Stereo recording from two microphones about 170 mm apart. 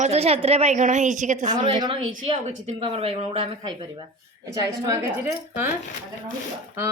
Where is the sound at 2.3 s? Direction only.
45° right (ahead or behind).